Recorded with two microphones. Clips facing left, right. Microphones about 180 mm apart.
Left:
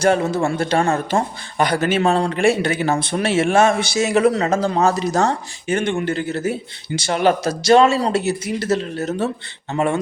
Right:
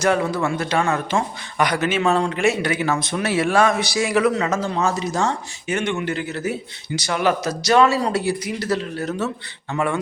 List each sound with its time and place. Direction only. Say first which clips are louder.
0.0 s a man's voice: left 3 dB; 25° left (ahead or behind)
6.0 s speech: left 3 dB; 45° left (ahead or behind)
6.5 s speech: left 2 dB; 25° left (ahead or behind)